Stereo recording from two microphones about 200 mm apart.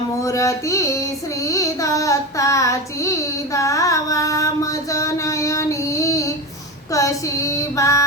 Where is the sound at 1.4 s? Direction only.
15° left (ahead or behind).